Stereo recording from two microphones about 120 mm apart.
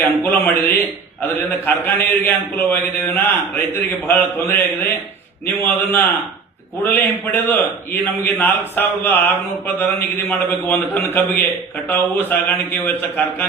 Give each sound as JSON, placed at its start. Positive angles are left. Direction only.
{"t": 0.0, "sound": "a man's voice", "side_deg": 15}